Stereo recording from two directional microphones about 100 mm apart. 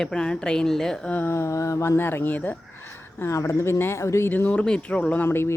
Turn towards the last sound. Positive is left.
turn(degrees=25)  # may be behind; listen again after turning